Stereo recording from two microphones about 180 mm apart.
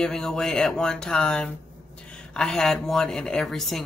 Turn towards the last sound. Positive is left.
turn(degrees=0)  # may be behind; listen again after turning